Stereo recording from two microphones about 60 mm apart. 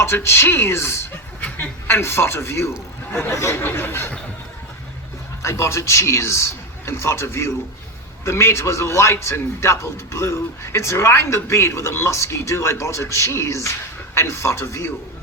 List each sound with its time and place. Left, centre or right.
0.0 s a man's voice: left
1.4 s snicker: left
1.9 s a man's voice: left
3.5 s speech: left
5.4 s a man's voice: left